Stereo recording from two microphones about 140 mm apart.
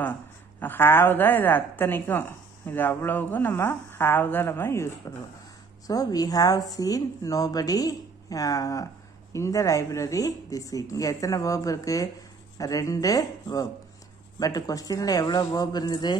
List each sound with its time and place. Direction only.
0.6 s a woman's voice: 15° left (ahead or behind); by 16.2 s 30° left (ahead or behind)